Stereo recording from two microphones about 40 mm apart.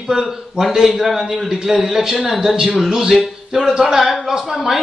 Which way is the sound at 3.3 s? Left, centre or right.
Centre.